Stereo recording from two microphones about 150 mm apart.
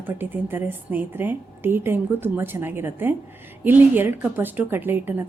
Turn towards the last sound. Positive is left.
turn(degrees=-15)  # may be behind; listen again after turning